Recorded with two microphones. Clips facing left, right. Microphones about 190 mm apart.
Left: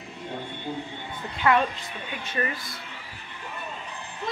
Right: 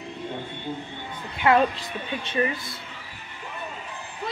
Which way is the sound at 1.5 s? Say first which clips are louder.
Right 2 dB; 25° right (ahead or behind).